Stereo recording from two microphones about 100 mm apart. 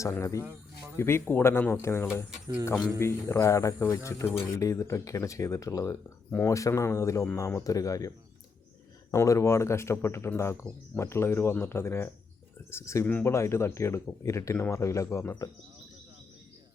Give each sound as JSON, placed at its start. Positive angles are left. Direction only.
{"t": 0.0, "sound": "speech", "side_deg": 30}
{"t": 9.1, "sound": "speech", "side_deg": 30}